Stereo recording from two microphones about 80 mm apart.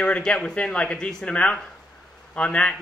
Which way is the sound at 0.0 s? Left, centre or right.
Centre.